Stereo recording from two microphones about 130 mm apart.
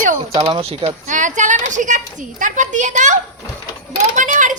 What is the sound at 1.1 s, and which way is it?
A woman's voice, 75° right (ahead or behind).